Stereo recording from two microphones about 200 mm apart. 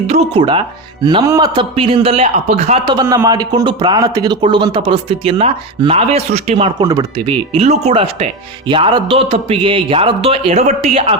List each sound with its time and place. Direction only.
0.1 s speech: 30° right (ahead or behind)
6.7 s speech: 20° right (ahead or behind)